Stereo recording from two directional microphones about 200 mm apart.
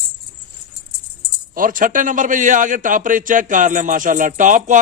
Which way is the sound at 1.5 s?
45° right (ahead or behind).